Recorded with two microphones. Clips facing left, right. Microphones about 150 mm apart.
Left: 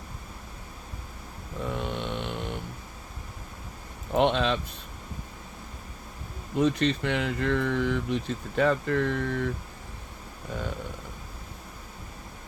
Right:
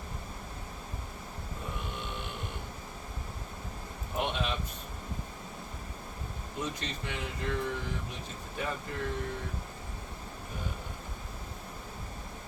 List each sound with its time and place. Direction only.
1.7 s a sound: 90° left
4.1 s speech: 90° left
6.6 s speech: 80° left